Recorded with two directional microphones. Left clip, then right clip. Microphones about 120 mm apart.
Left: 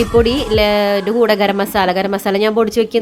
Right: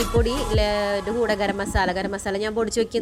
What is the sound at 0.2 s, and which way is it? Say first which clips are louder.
A woman's voice: left 11 dB; 25° right (ahead or behind).